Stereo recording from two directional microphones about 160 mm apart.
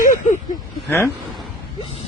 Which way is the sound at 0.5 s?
15° left (ahead or behind).